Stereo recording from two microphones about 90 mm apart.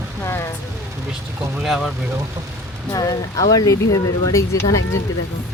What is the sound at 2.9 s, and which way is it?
Speech, 40° left (ahead or behind).